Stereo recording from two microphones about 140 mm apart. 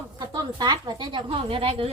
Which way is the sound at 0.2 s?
30° right (ahead or behind).